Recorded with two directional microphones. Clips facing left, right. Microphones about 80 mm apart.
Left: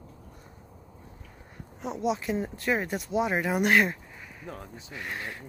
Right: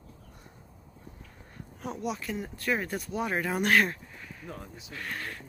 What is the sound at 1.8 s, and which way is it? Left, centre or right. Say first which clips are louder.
Speech: left 5 dB; centre.